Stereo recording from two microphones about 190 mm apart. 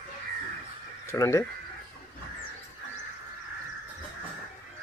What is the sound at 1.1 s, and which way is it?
Speech, 15° left (ahead or behind).